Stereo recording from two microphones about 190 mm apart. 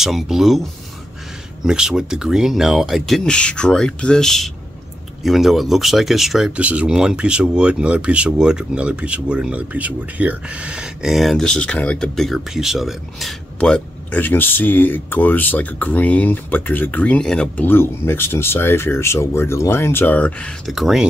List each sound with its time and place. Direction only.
0.0 s speech: centre (ahead or behind)
1.6 s speech: 5° right (ahead or behind)